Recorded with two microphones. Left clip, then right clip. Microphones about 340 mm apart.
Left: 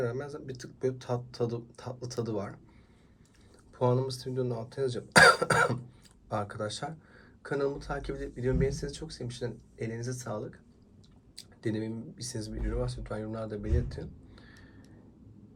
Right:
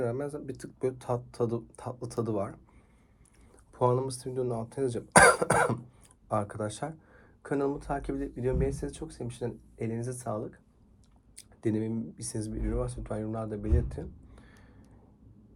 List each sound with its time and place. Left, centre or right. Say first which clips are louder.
0.0 s speech: right 2 dB; centre
3.8 s speech: right 2 dB; centre